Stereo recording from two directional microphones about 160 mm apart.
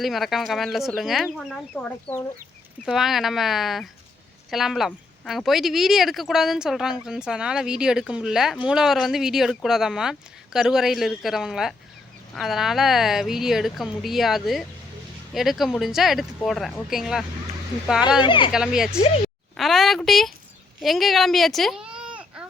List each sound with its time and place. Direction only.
0.0 s speech: centre (ahead or behind)
1.8 s speech: 10° left (ahead or behind)
2.8 s speech: centre (ahead or behind)
18.2 s speech: 30° left (ahead or behind)
18.5 s a child's voice: 5° right (ahead or behind)